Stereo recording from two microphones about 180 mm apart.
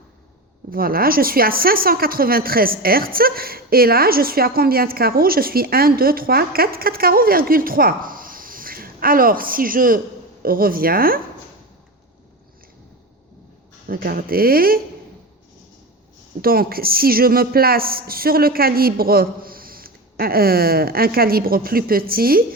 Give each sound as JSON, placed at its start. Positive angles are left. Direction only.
{"t": 0.7, "sound": "speech", "side_deg": -55}
{"t": 13.8, "sound": "speech", "side_deg": -55}
{"t": 16.4, "sound": "speech", "side_deg": -55}